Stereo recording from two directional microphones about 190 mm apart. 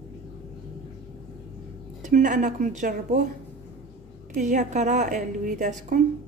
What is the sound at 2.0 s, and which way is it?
A woman's voice, 40° right (ahead or behind).